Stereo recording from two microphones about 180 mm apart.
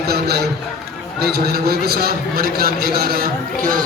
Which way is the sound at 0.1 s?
60° right (ahead or behind).